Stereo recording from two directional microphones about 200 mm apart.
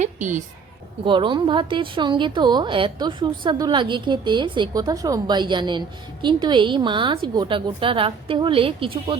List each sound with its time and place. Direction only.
0.0 s a woman's voice: 40° right (ahead or behind)
1.0 s a woman's voice: 25° right (ahead or behind)